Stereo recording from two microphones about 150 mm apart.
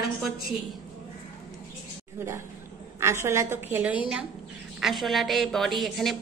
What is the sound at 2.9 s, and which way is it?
A woman's voice, 15° right (ahead or behind).